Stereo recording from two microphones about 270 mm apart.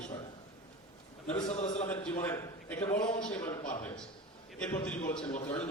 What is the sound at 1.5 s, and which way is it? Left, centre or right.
Speech, left.